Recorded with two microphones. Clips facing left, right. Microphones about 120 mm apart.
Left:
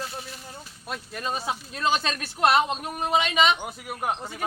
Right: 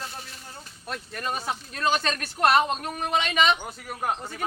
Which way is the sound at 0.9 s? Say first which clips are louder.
Even; 10° left (ahead or behind).